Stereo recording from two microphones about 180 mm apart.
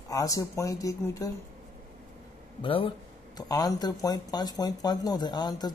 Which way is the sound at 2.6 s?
30° left (ahead or behind).